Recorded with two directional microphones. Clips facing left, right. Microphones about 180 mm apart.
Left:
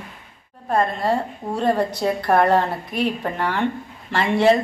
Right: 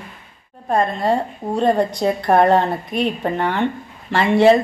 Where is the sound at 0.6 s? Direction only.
25° right (ahead or behind).